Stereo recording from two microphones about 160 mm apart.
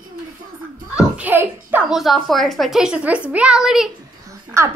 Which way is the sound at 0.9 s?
10° right (ahead or behind).